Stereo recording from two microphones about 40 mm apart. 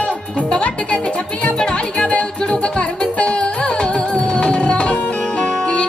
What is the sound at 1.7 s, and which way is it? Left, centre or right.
Music, left.